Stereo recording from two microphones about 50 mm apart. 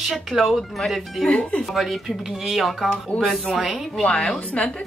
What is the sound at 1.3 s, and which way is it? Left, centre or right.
Speech, left.